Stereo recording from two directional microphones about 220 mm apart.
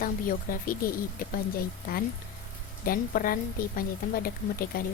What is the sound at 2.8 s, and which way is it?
A woman's voice, 40° left (ahead or behind).